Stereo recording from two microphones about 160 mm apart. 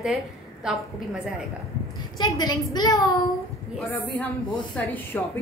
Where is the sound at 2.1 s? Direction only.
25° left (ahead or behind).